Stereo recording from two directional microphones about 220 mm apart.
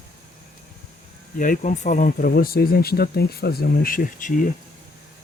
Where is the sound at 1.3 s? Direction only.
35° left (ahead or behind).